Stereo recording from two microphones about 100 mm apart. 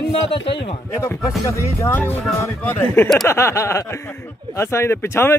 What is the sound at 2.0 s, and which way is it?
Speech, 20° left (ahead or behind).